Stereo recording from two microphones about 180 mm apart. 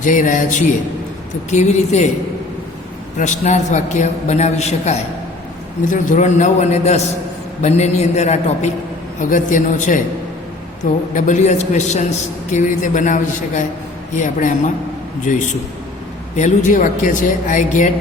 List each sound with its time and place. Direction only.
0.0 s a man's voice: 45° left (ahead or behind)
3.2 s a man's voice: 40° left (ahead or behind)
11.1 s a man's voice: 45° left (ahead or behind)